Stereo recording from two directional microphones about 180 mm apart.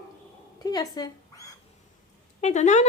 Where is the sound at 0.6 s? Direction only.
20° left (ahead or behind).